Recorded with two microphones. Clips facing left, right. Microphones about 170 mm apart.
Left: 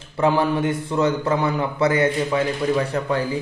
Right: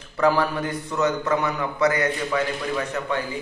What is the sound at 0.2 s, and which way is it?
A man's voice, 25° left (ahead or behind).